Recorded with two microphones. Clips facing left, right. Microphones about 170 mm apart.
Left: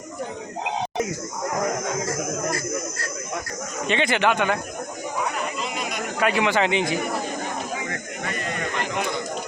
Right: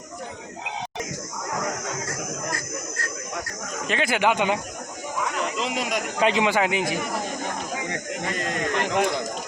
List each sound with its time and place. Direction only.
3.8 s speech: 5° right (ahead or behind)
5.4 s chatter: 90° right
6.1 s speech: 20° right (ahead or behind); by 6.9 s 5° right (ahead or behind)
8.4 s speech: 90° right